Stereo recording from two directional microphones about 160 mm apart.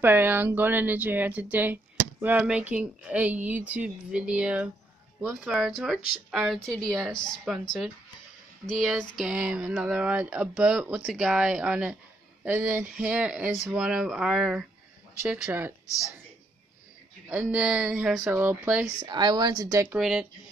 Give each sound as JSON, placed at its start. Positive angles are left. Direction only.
{"t": 0.0, "sound": "speech", "side_deg": -15}
{"t": 9.1, "sound": "speech", "side_deg": -5}
{"t": 17.3, "sound": "speech", "side_deg": -10}
{"t": 18.9, "sound": "speech", "side_deg": -25}
{"t": 20.0, "sound": "speech", "side_deg": -5}